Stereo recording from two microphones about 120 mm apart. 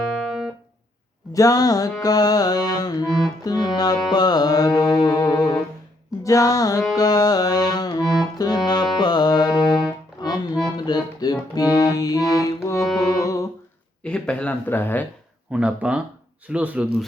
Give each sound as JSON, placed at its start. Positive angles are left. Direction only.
{"t": 1.3, "sound": "music", "side_deg": 30}
{"t": 3.1, "sound": "music", "side_deg": 5}
{"t": 3.4, "sound": "music", "side_deg": 35}
{"t": 14.0, "sound": "speech", "side_deg": 10}
{"t": 15.5, "sound": "speech", "side_deg": -10}